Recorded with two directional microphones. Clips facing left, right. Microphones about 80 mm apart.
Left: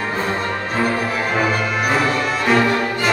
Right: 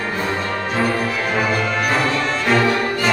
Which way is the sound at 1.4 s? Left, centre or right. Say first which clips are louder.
Right 1 dB; centre.